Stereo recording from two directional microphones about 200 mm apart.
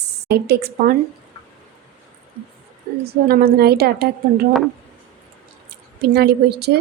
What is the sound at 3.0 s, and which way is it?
A woman's voice, 50° right (ahead or behind).